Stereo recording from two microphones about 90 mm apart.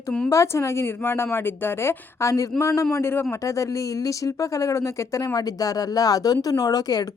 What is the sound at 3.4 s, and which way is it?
Speech, 35° left (ahead or behind).